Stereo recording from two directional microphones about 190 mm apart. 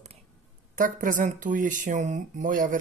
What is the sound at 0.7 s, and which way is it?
Speech, 45° right (ahead or behind).